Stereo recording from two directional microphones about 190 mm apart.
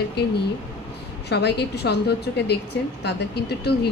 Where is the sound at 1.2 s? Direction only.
60° left (ahead or behind).